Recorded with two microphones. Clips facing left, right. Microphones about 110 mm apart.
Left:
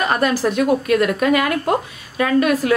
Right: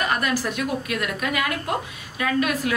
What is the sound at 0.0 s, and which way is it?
A woman's voice, 30° left (ahead or behind).